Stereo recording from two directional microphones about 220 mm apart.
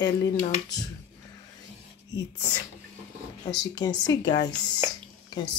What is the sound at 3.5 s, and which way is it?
A woman's voice, 20° left (ahead or behind).